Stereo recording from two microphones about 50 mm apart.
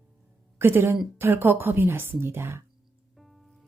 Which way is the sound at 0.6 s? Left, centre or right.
Right.